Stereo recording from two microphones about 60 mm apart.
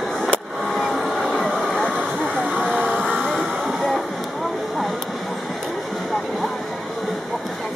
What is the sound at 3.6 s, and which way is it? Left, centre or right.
Music, centre.